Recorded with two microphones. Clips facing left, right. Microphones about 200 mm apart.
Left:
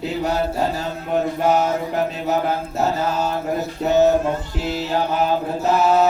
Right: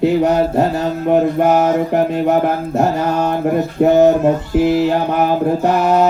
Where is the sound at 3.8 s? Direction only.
55° right (ahead or behind).